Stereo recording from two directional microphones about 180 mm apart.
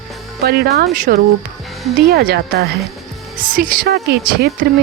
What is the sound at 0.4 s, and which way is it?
Speech, 60° right (ahead or behind).